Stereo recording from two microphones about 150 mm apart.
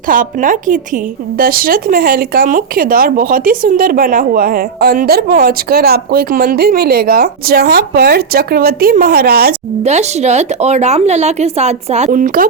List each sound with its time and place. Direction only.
0.1 s speech: 65° right (ahead or behind)
1.4 s speech: 75° right (ahead or behind)
9.8 s speech: 50° right (ahead or behind)
12.1 s speech: 65° right (ahead or behind)